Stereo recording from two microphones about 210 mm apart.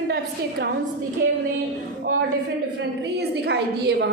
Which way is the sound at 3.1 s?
50° right (ahead or behind).